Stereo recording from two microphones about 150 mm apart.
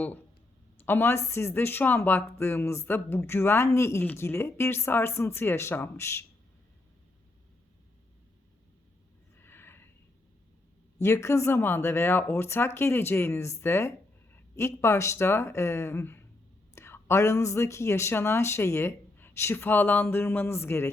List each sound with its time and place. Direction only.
0.9 s speech: 15° left (ahead or behind)
9.4 s a sound: 15° left (ahead or behind)
11.0 s speech: 20° left (ahead or behind)